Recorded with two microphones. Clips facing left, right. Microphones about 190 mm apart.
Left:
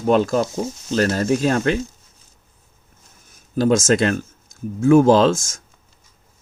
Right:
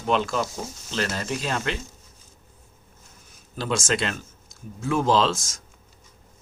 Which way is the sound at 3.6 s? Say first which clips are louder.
Left 10 dB; 45° left (ahead or behind).